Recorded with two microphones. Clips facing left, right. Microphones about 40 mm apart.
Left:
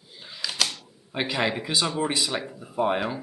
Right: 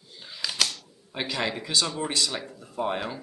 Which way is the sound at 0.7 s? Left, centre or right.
Centre.